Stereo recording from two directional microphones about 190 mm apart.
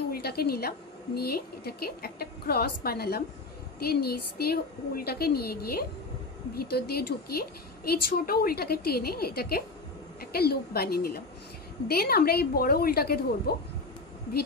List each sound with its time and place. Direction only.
0.1 s a woman's voice: 55° left (ahead or behind)